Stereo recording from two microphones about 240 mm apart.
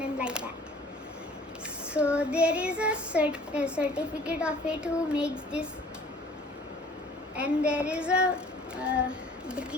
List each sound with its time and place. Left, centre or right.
0.0 s a sound: centre
1.9 s child singing: centre
7.3 s child singing: centre